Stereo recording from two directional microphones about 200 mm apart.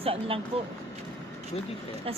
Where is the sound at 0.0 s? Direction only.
30° right (ahead or behind).